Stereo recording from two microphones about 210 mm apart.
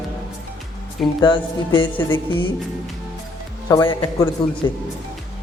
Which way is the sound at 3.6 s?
20° left (ahead or behind).